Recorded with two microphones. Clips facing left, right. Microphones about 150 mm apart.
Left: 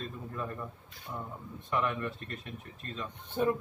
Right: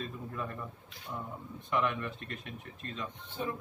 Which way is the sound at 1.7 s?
Centre (ahead or behind).